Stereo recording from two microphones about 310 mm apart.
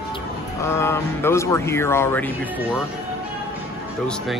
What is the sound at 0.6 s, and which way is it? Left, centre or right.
Speech, centre.